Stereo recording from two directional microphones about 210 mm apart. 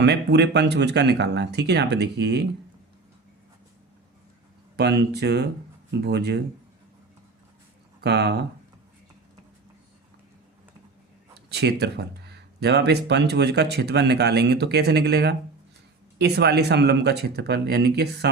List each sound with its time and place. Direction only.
0.0 s speech: 55° right (ahead or behind)
4.8 s speech: 55° right (ahead or behind)
8.0 s speech: 50° right (ahead or behind)
11.4 s speech: 50° right (ahead or behind)